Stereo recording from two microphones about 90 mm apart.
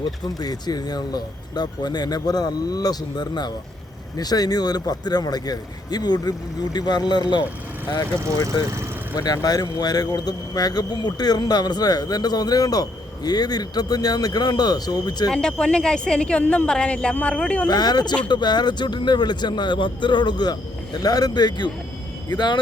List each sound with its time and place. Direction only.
0.3 s speech: 45° left (ahead or behind)
9.1 s speech: 45° left (ahead or behind)
15.3 s speech: 10° left (ahead or behind)
17.7 s speech: 50° left (ahead or behind)